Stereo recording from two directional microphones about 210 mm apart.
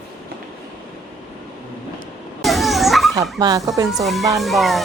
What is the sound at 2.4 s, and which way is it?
Dog, centre (ahead or behind).